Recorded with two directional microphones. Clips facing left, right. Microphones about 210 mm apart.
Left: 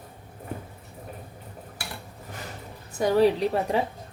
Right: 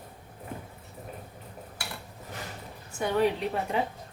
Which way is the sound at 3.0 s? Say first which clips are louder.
Left 6 dB; 35° left (ahead or behind).